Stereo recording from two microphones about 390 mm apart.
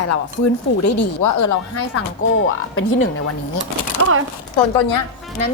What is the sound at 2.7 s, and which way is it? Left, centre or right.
Speech, left.